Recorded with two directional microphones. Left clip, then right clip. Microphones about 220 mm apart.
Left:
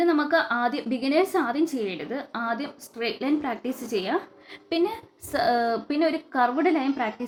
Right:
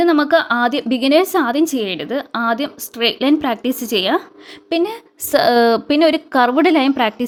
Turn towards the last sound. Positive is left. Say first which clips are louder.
# right 11 dB
turn(degrees=-50)  # may be behind; listen again after turning